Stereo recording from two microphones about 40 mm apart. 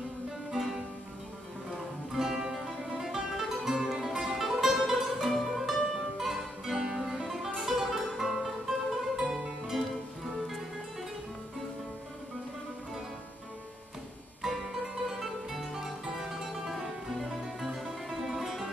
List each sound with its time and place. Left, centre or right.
0.6 s music: centre
2.1 s music: centre
7.2 s music: centre
10.3 s music: centre
14.4 s music: centre
15.8 s music: centre